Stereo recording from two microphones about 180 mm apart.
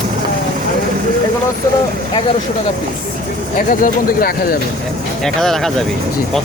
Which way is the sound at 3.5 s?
50° left (ahead or behind).